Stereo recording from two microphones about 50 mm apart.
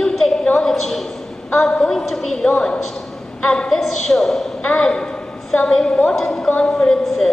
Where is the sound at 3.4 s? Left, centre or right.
Centre.